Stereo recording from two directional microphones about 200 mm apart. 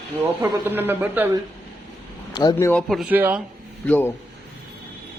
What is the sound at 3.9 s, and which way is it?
Speech, 10° left (ahead or behind).